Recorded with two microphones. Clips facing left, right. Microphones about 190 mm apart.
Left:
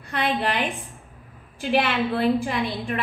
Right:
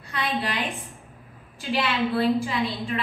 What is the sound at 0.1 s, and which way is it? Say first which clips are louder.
Speech: left 4 dB; 55° left (ahead or behind).